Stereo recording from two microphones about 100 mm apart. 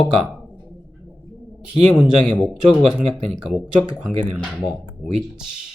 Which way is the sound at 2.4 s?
10° right (ahead or behind).